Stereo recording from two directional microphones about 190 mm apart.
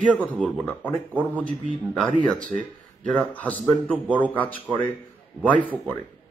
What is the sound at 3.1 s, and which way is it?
A man's voice, 5° left (ahead or behind).